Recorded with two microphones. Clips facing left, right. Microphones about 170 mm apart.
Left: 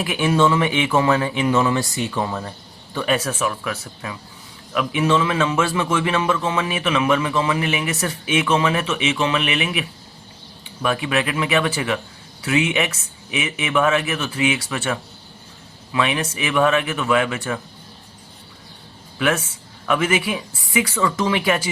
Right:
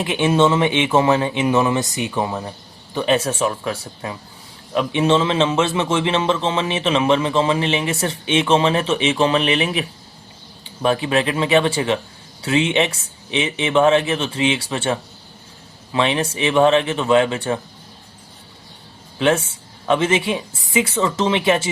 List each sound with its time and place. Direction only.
0.0 s a man's voice: 25° right (ahead or behind)
19.2 s a man's voice: 30° right (ahead or behind)